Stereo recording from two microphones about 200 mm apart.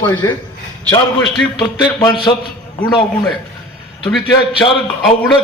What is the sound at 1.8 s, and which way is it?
Speech, 20° left (ahead or behind).